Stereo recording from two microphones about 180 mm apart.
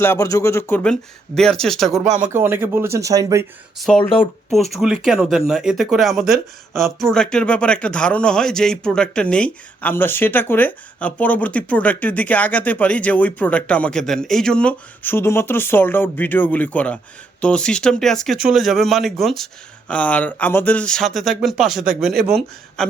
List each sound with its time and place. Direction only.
0.0 s speech: 15° left (ahead or behind)
2.0 s speech: 45° right (ahead or behind)
2.3 s speech: 10° right (ahead or behind)
3.8 s speech: 5° left (ahead or behind)